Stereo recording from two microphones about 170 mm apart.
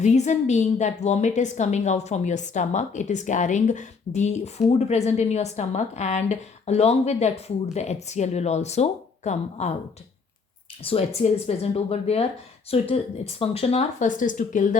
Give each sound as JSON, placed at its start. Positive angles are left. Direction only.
{"t": 0.0, "sound": "a woman's voice", "side_deg": 45}
{"t": 10.8, "sound": "a woman's voice", "side_deg": 35}